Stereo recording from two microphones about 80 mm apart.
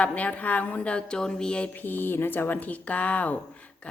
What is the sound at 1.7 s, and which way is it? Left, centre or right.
Speech, left.